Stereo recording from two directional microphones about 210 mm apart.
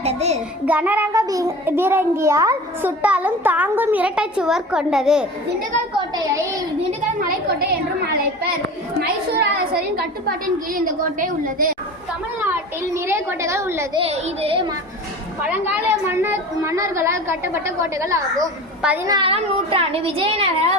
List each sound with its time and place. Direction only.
0.0 s child singing: 30° right (ahead or behind)
0.6 s child singing: 5° right (ahead or behind)
6.0 s child singing: 15° right (ahead or behind)
7.2 s a sound: 45° right (ahead or behind)
9.0 s a woman's voice: 50° right (ahead or behind)
12.4 s child singing: 10° right (ahead or behind)
14.0 s a woman's voice: 30° right (ahead or behind)
15.4 s child singing: 5° right (ahead or behind)
18.3 s a woman's voice: 5° right (ahead or behind)
19.0 s a woman's voice: 20° right (ahead or behind)